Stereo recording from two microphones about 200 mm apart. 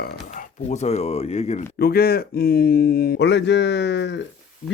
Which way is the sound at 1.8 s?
50° left (ahead or behind).